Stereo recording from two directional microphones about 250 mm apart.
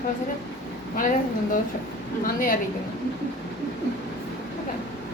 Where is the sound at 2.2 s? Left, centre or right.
Left.